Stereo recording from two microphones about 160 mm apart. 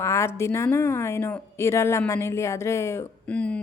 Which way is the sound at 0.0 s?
20° left (ahead or behind).